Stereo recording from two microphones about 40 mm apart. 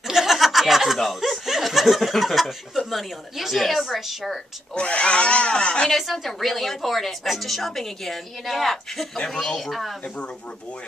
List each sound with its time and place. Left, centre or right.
0.0 s snicker: centre
2.9 s a woman's voice: centre
4.7 s speech: left
5.9 s a woman's voice: centre
10.0 s speech: left